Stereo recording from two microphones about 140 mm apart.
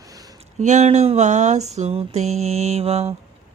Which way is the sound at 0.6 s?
60° right (ahead or behind).